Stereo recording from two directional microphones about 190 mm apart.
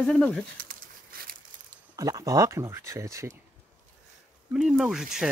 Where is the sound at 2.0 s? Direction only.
20° right (ahead or behind).